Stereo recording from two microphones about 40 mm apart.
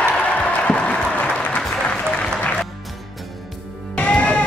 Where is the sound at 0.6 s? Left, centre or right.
Left.